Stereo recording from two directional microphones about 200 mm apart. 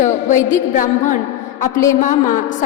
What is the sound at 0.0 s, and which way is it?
A woman's voice, 40° left (ahead or behind).